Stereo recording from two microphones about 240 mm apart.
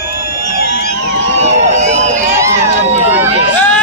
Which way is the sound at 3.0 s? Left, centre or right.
Centre.